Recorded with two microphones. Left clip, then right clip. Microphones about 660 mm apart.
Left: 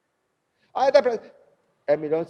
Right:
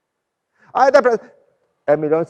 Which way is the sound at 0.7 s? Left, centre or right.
Right.